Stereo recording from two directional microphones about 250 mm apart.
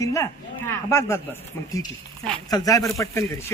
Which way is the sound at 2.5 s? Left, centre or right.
Centre.